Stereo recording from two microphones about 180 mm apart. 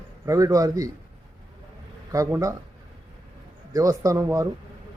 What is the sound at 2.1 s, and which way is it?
Speech, 15° right (ahead or behind).